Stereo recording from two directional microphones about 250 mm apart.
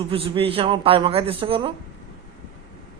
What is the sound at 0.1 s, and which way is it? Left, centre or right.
A man's voice, right.